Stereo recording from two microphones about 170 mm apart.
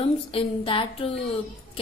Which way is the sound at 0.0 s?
35° left (ahead or behind).